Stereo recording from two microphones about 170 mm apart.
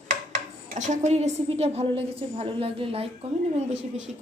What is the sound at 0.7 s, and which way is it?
A woman's voice, 45° right (ahead or behind).